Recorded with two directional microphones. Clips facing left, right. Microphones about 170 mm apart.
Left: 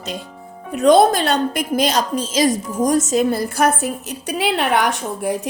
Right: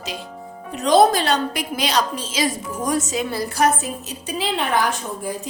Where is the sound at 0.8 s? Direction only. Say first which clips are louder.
Left 3 dB; 50° left (ahead or behind).